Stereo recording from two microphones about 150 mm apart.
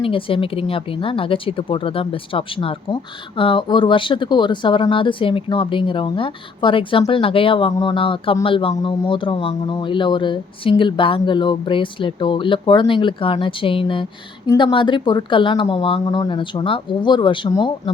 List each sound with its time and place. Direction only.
0.0 s speech: 35° left (ahead or behind)